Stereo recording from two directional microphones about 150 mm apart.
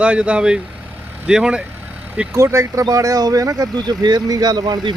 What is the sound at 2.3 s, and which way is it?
Speech, 20° right (ahead or behind).